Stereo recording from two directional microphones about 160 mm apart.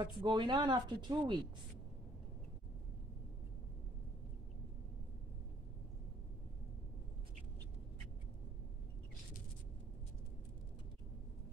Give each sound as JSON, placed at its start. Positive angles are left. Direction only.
{"t": 0.0, "sound": "speech", "side_deg": -30}